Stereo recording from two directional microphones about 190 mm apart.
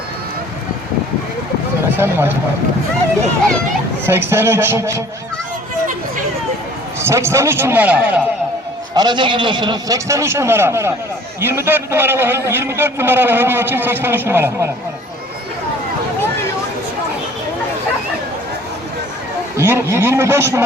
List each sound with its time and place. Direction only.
2.0 s a man's voice: 10° right (ahead or behind)
4.0 s a man's voice: 10° right (ahead or behind)
7.0 s a man's voice: 15° right (ahead or behind)
9.0 s a man's voice: 25° right (ahead or behind)
19.5 s a man's voice: 15° right (ahead or behind)